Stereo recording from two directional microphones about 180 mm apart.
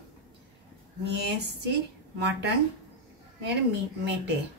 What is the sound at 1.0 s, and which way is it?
Speech, 70° right (ahead or behind).